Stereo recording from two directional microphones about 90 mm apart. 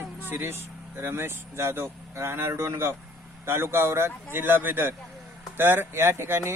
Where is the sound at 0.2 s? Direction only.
25° right (ahead or behind).